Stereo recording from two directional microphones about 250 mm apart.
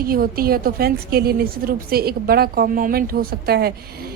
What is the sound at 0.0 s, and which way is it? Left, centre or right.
A woman's voice, right.